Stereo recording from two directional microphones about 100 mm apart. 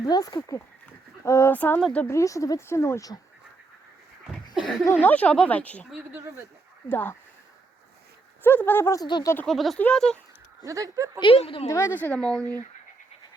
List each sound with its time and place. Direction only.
0.0 s speech: 40° left (ahead or behind); by 1.8 s 20° left (ahead or behind)
2.0 s speech: 30° left (ahead or behind)
4.5 s speech: centre (ahead or behind)
4.9 s speech: 15° left (ahead or behind)
8.4 s speech: 20° left (ahead or behind)
9.0 s speech: 50° left (ahead or behind)
9.5 s speech: centre (ahead or behind)
10.7 s speech: 35° right (ahead or behind)
11.2 s a woman's voice: 65° left (ahead or behind)
11.9 s speech: 15° left (ahead or behind)